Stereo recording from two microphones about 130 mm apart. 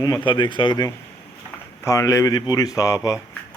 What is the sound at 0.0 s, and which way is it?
Speech, 35° left (ahead or behind).